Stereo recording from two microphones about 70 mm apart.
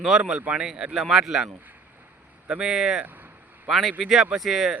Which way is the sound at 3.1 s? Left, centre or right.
Right.